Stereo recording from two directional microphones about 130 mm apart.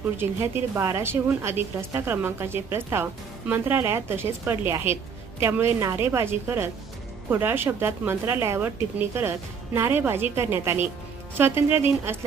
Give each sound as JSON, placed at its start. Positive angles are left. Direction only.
{"t": 0.2, "sound": "a woman's voice", "side_deg": -20}